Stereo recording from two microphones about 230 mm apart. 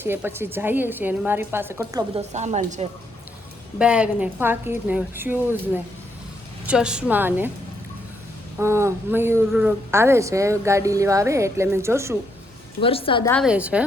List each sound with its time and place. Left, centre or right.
0.0 s a woman's voice: centre
2.3 s a woman's voice: right
3.8 s a woman's voice: centre
8.5 s a woman's voice: centre
12.8 s a woman's voice: left
13.4 s a woman's voice: centre